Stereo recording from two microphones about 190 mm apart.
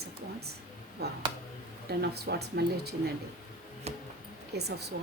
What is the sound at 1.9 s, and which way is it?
Speech, 55° right (ahead or behind).